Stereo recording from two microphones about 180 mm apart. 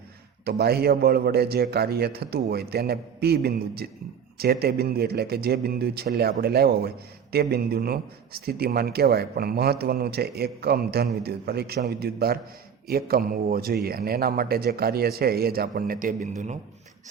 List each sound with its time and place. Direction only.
0.4 s a man's voice: 60° right (ahead or behind); by 16.6 s 40° right (ahead or behind)